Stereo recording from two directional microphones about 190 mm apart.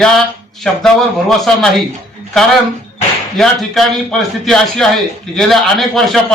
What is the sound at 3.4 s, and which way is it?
A man's voice, centre (ahead or behind).